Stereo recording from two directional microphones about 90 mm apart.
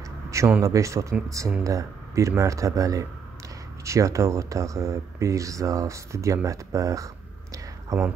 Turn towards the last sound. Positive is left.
turn(degrees=-40)  # may be behind; listen again after turning